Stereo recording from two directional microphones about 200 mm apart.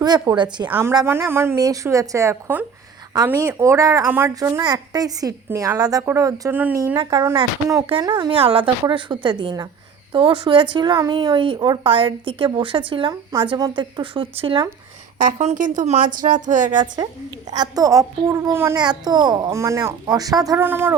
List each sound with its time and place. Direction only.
0.0 s speech: 20° right (ahead or behind)
15.2 s a woman's voice: 40° right (ahead or behind)
16.8 s speech: 20° right (ahead or behind)